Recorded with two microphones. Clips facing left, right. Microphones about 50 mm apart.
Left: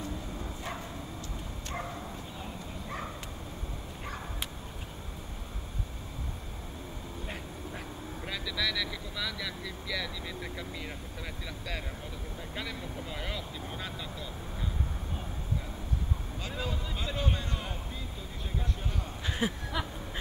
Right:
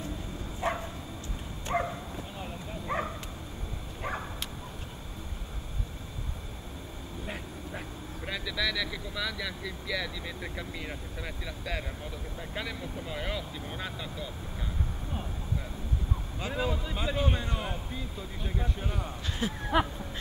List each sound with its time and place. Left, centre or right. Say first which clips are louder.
0.6 s bow-wow: right 11 dB; right
8.3 s speech: right 2 dB; centre
12.5 s speech: right 2 dB; centre
16.3 s speech: right 6 dB; centre
19.2 s speech: left 3 dB; centre
19.6 s a sound: right 8 dB; right